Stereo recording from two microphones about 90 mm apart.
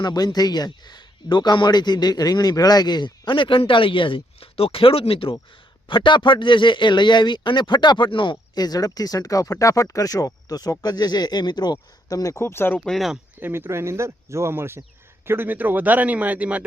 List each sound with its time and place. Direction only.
0.0 s speech: 50° left (ahead or behind); by 5.4 s 85° left
5.9 s speech: 65° left (ahead or behind); by 12.8 s 25° left (ahead or behind)
12.8 s speech: centre (ahead or behind)
13.4 s speech: 25° right (ahead or behind)